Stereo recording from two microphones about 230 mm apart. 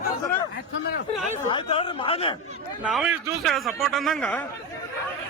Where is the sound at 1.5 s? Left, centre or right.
Left.